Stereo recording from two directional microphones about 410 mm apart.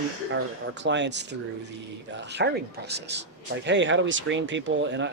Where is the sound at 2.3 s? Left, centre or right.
Right.